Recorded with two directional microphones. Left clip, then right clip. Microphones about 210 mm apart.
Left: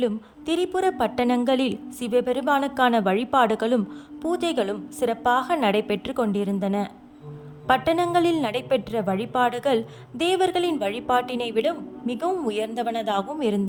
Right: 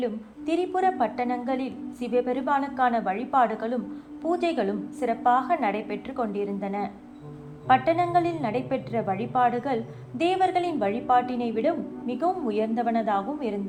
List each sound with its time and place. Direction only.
0.0 s a woman's voice: 40° left (ahead or behind)